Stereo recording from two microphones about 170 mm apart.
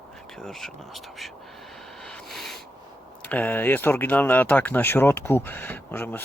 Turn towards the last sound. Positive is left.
turn(degrees=10)  # may be behind; listen again after turning